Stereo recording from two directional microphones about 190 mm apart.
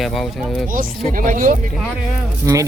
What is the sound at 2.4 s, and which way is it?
Speech, 15° right (ahead or behind).